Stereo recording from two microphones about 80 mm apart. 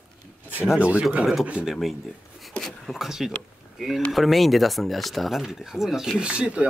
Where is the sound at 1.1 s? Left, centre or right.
Centre.